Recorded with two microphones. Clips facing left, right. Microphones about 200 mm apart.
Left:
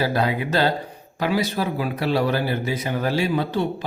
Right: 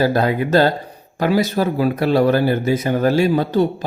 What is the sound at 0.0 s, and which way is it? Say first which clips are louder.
Speech: right 5 dB; 45° right (ahead or behind).